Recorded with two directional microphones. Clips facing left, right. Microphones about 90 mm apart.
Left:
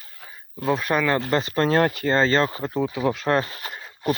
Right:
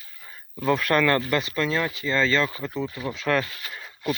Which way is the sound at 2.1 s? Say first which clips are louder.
Left 1 dB; 35° left (ahead or behind).